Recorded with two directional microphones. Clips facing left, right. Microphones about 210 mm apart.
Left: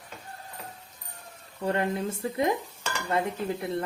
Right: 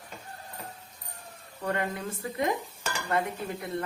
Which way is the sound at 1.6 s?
25° left (ahead or behind).